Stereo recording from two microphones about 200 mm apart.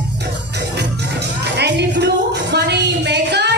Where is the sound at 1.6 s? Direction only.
60° right (ahead or behind).